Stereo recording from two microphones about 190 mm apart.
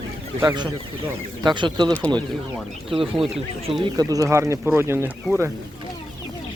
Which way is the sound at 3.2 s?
Centre (ahead or behind).